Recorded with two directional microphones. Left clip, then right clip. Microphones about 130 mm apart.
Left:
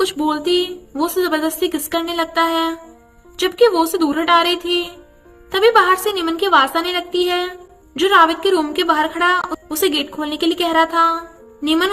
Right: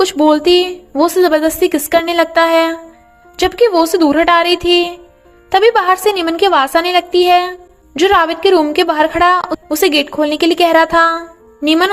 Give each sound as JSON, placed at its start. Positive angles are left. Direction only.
{"t": 0.0, "sound": "speech", "side_deg": -45}